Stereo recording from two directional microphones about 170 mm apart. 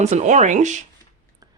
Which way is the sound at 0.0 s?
40° right (ahead or behind).